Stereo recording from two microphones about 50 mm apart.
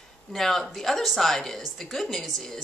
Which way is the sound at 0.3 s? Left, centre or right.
Centre.